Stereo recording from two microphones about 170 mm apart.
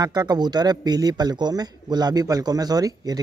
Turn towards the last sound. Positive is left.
turn(degrees=-20)  # may be behind; listen again after turning